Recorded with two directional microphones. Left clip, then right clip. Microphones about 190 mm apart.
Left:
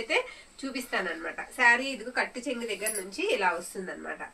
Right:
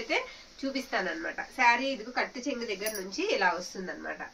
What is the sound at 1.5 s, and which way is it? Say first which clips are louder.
Speech: left 2 dB; 5° left (ahead or behind).